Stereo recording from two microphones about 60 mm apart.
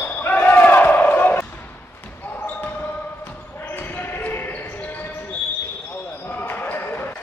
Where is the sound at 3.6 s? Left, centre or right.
Left.